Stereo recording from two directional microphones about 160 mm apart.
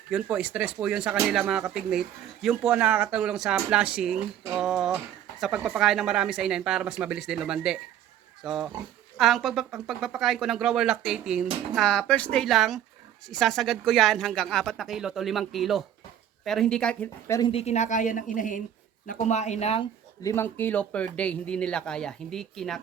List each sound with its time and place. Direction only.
0.1 s speech: 5° right (ahead or behind)
4.5 s a sound: 5° right (ahead or behind)
5.5 s speech: 5° right (ahead or behind); by 17.4 s 15° left (ahead or behind)
17.4 s a woman's voice: 40° left (ahead or behind)
20.2 s speech: 15° left (ahead or behind)